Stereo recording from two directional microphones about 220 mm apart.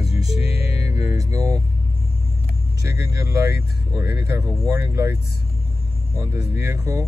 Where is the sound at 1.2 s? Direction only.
15° right (ahead or behind).